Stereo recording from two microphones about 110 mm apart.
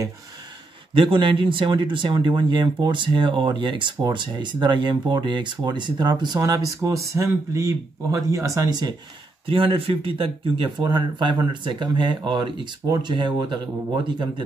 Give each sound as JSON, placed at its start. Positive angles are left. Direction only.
{"t": 0.9, "sound": "speech", "side_deg": -50}
{"t": 9.5, "sound": "speech", "side_deg": -55}